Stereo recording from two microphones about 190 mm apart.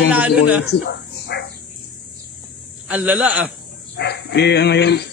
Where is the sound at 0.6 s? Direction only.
60° left (ahead or behind).